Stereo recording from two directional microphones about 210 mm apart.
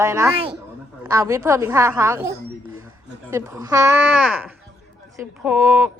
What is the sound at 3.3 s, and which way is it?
A woman's voice, 15° right (ahead or behind).